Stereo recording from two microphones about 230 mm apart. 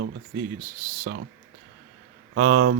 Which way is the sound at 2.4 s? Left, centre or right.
Right.